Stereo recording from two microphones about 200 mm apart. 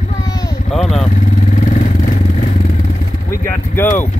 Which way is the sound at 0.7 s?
Centre (ahead or behind).